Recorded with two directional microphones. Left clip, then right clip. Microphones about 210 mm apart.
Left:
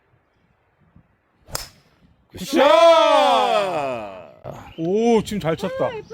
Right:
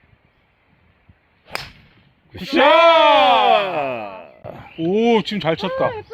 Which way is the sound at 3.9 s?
15° left (ahead or behind).